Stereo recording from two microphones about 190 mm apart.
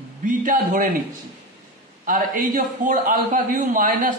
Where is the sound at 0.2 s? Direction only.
45° right (ahead or behind).